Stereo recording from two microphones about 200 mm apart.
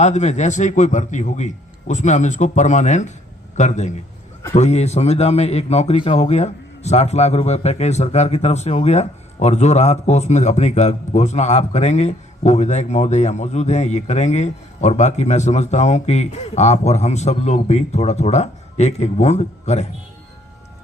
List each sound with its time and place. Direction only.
0.0 s a man's voice: 35° left (ahead or behind)